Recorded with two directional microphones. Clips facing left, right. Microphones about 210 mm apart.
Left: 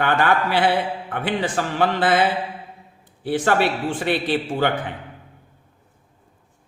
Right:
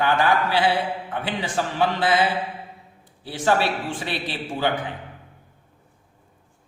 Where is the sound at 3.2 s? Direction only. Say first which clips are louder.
Left 2 dB; 55° left (ahead or behind).